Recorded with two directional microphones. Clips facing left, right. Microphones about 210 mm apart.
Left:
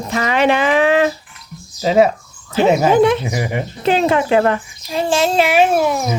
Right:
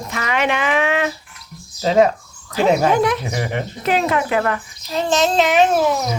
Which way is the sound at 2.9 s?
25° left (ahead or behind).